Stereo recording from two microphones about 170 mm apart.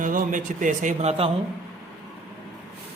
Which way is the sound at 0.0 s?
50° right (ahead or behind).